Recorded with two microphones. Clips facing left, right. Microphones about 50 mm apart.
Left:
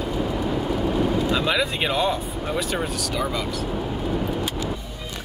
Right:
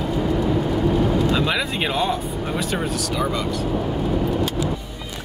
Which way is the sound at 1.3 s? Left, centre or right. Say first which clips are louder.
Right 1 dB; centre.